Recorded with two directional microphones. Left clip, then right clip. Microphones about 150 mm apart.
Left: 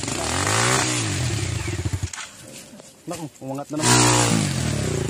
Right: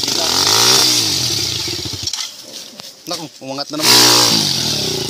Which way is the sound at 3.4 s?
15° right (ahead or behind).